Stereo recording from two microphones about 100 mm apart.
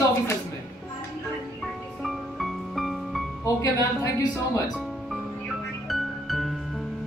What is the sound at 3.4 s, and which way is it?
Speech, 30° left (ahead or behind).